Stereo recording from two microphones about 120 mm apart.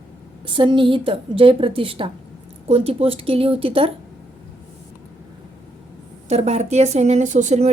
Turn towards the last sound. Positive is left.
turn(degrees=-75)  # may be behind; listen again after turning